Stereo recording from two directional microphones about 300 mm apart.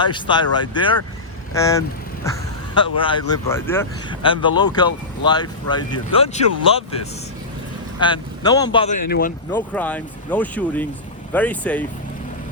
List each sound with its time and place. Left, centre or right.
0.0 s speech: centre
2.7 s speech: centre
9.0 s speech: left
9.5 s speech: centre